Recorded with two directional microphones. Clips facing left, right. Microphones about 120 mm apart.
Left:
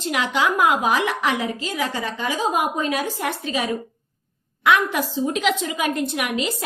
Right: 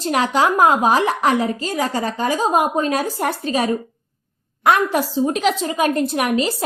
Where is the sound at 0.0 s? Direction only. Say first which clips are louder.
Right 4 dB; 40° right (ahead or behind).